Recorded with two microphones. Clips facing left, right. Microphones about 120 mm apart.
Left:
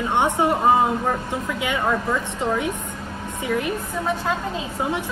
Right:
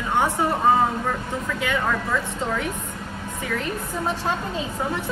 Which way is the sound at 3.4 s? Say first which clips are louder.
Left 4 dB; 15° left (ahead or behind).